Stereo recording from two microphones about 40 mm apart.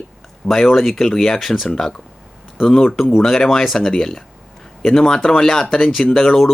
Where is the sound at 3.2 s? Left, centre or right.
Centre.